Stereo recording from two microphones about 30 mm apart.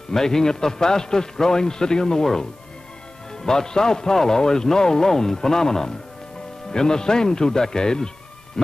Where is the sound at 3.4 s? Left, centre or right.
Left.